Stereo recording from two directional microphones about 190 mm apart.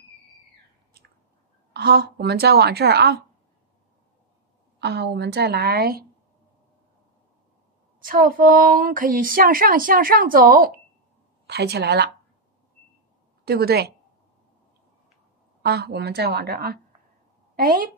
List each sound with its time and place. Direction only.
1.7 s a woman's voice: 60° right (ahead or behind)
4.7 s a woman's voice: 60° right (ahead or behind)
8.0 s a woman's voice: 50° right (ahead or behind)
13.5 s a woman's voice: 55° right (ahead or behind)
15.6 s a woman's voice: 60° right (ahead or behind)